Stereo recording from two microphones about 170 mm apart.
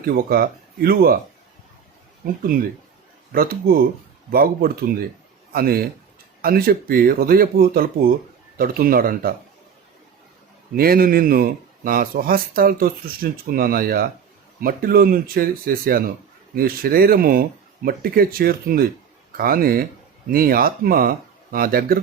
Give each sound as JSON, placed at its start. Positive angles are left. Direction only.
{"t": 0.0, "sound": "speech", "side_deg": -60}
{"t": 2.2, "sound": "a man's voice", "side_deg": -60}
{"t": 10.8, "sound": "speech", "side_deg": -60}